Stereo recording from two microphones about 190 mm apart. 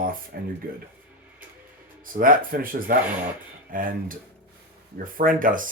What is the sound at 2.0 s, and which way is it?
Speech, 45° right (ahead or behind).